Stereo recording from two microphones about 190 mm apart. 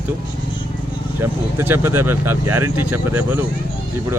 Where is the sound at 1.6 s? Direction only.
10° right (ahead or behind).